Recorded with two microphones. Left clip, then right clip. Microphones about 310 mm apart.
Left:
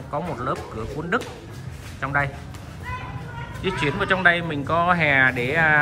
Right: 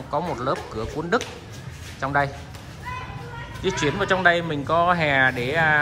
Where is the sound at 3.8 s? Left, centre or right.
Centre.